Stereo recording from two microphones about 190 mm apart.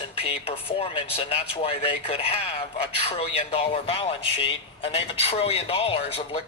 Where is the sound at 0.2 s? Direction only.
30° left (ahead or behind).